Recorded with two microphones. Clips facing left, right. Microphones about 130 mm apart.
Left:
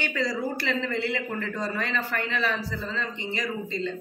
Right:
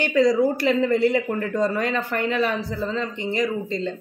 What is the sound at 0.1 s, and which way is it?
Speech, 45° right (ahead or behind).